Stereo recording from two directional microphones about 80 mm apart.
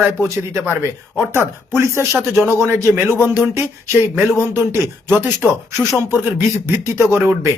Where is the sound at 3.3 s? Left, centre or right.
Right.